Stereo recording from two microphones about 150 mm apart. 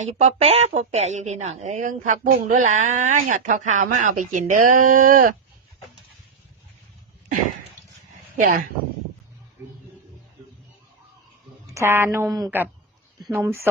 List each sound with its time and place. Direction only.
0.0 s a woman's voice: 50° right (ahead or behind)
8.4 s speech: 65° right (ahead or behind)
9.6 s a sound: 15° right (ahead or behind)
11.6 s a woman's voice: 20° right (ahead or behind)